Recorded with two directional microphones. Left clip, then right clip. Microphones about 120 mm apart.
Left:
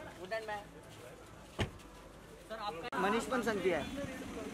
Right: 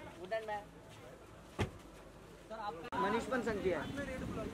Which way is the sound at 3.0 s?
30° left (ahead or behind).